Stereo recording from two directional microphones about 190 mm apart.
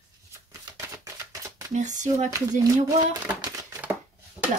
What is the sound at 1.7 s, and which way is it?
Speech, 40° right (ahead or behind).